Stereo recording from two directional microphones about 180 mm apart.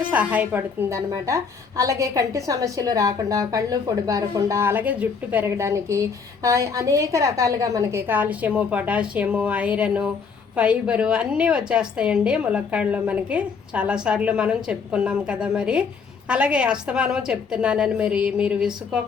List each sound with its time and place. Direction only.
0.0 s a woman's voice: 10° right (ahead or behind)